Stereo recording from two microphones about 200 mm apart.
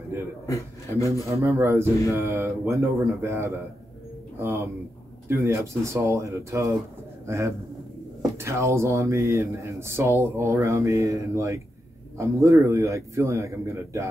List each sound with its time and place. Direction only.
0.5 s a man's voice: 15° left (ahead or behind)
1.3 s speech: 10° right (ahead or behind)